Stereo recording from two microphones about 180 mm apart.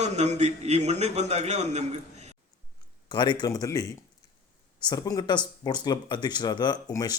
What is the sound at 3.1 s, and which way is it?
Speech, 25° left (ahead or behind).